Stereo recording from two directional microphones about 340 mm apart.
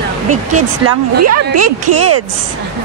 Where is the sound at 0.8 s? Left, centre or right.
Right.